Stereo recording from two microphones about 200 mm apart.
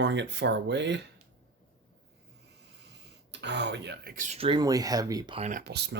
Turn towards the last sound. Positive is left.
turn(degrees=-55)  # may be behind; listen again after turning